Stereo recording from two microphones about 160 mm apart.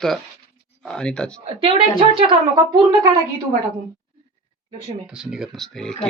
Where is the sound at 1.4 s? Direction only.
35° right (ahead or behind).